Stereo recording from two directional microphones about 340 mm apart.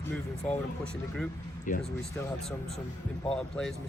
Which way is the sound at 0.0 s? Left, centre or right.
Centre.